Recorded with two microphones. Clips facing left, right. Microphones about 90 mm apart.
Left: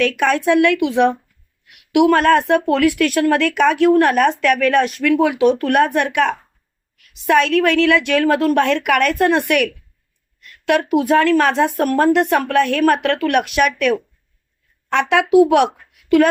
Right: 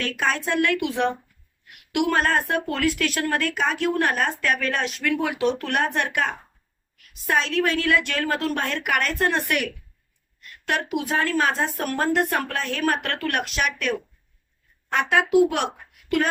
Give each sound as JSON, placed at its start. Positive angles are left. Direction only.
{"t": 0.0, "sound": "speech", "side_deg": 65}
{"t": 3.2, "sound": "speech", "side_deg": 85}
{"t": 7.3, "sound": "a woman's voice", "side_deg": 65}
{"t": 10.7, "sound": "a woman's voice", "side_deg": 70}
{"t": 10.9, "sound": "speech", "side_deg": 55}
{"t": 14.9, "sound": "a woman's voice", "side_deg": 75}